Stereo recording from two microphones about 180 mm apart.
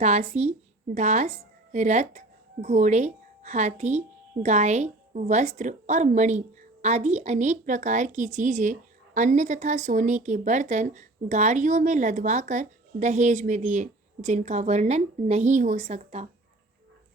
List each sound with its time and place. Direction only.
0.0 s a woman's voice: 35° right (ahead or behind)